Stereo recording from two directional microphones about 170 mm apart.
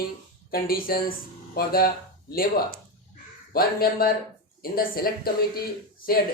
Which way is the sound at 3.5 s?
60° left (ahead or behind).